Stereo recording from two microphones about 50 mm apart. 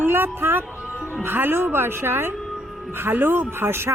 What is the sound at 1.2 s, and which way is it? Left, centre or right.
Speech, right.